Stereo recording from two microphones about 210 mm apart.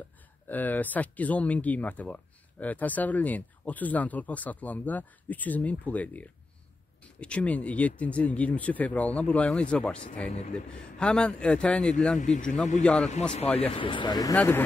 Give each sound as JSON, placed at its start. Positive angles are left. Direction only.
{"t": 0.5, "sound": "a man's voice", "side_deg": 10}
{"t": 12.2, "sound": "speech", "side_deg": 35}
{"t": 12.8, "sound": "a man's voice", "side_deg": 0}
{"t": 13.6, "sound": "speech", "side_deg": 25}
{"t": 14.3, "sound": "speech", "side_deg": 10}